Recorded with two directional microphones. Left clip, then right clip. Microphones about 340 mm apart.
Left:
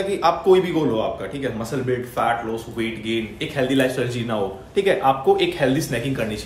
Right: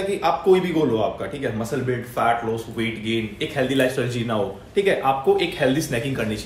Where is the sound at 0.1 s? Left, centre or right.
Centre.